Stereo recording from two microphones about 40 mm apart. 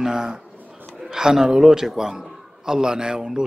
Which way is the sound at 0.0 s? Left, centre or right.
Centre.